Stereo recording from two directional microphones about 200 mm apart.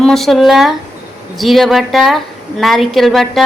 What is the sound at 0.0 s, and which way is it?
A woman's voice, centre (ahead or behind).